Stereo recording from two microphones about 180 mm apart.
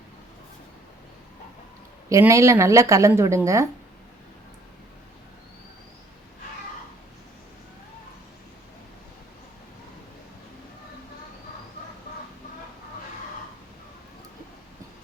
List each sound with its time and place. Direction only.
2.0 s speech: 15° right (ahead or behind)